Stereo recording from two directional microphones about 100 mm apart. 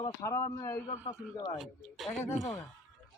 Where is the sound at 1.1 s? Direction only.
45° left (ahead or behind).